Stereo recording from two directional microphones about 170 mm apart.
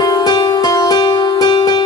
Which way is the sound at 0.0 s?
25° left (ahead or behind).